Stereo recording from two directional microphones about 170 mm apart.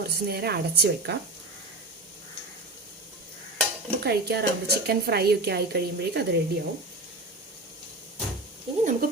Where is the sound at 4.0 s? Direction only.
70° right (ahead or behind).